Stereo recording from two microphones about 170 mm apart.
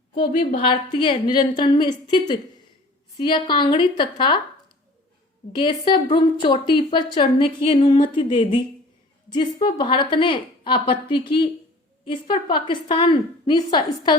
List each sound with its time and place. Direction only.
0.5 s a woman's voice: 30° left (ahead or behind)
5.5 s a woman's voice: 30° left (ahead or behind)